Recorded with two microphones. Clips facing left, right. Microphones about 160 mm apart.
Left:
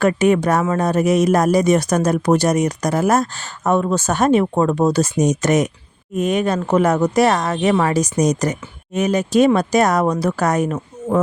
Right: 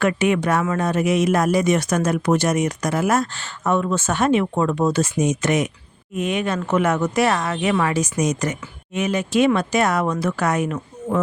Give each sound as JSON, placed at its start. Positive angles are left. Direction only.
{"t": 0.0, "sound": "speech", "side_deg": 40}